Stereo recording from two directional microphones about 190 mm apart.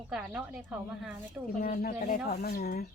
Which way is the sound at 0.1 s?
5° right (ahead or behind).